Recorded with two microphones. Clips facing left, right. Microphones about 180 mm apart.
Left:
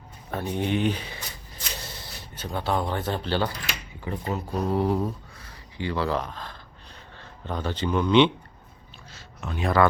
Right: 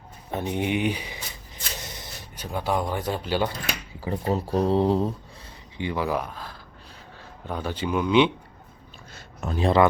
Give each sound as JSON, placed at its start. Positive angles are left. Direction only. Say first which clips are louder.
{"t": 0.3, "sound": "speech", "louder": "right 1 dB", "side_deg": -20}
{"t": 4.0, "sound": "a man's voice", "louder": "right 4 dB", "side_deg": -35}
{"t": 9.1, "sound": "a sound", "louder": "right 4 dB", "side_deg": -40}
{"t": 9.6, "sound": "speech", "louder": "right 2 dB", "side_deg": -20}